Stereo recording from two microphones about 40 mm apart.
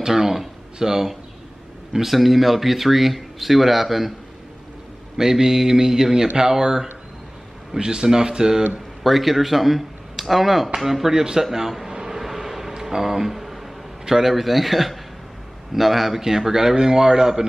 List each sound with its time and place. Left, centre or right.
0.0 s speech: centre
5.1 s speech: centre
9.0 s speech: centre
11.9 s vehicle: centre
12.7 s a sound: centre
14.0 s a man's voice: centre
14.3 s speech: centre